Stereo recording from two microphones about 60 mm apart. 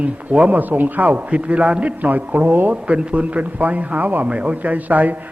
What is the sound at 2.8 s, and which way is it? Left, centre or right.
A man's voice, centre.